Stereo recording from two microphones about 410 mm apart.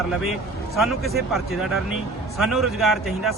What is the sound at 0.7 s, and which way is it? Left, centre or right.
A man's voice, centre.